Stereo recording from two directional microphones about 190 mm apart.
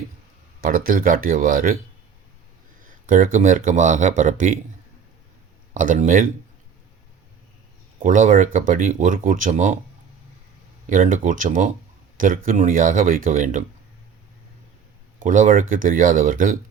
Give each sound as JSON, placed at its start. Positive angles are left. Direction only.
{"t": 0.6, "sound": "speech", "side_deg": -50}
{"t": 3.1, "sound": "a man's voice", "side_deg": -45}
{"t": 5.7, "sound": "speech", "side_deg": -45}
{"t": 8.0, "sound": "speech", "side_deg": -45}
{"t": 10.8, "sound": "speech", "side_deg": -45}
{"t": 15.2, "sound": "speech", "side_deg": -40}